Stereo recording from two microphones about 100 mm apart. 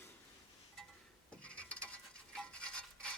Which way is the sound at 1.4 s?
15° left (ahead or behind).